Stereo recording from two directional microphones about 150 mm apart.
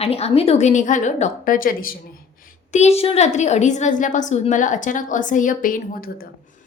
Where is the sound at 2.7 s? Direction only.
45° left (ahead or behind).